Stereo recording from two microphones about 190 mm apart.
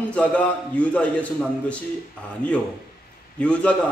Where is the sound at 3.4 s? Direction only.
5° left (ahead or behind).